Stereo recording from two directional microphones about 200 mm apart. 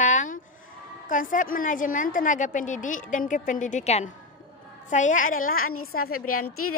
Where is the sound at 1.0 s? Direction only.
40° left (ahead or behind).